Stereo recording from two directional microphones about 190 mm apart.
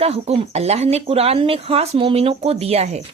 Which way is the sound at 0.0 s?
30° right (ahead or behind).